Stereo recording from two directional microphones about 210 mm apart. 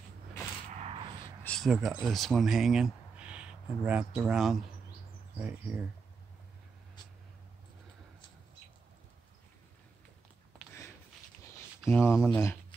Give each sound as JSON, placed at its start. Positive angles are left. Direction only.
{"t": 0.7, "sound": "a sound", "side_deg": -30}
{"t": 1.4, "sound": "speech", "side_deg": 5}
{"t": 11.8, "sound": "speech", "side_deg": 5}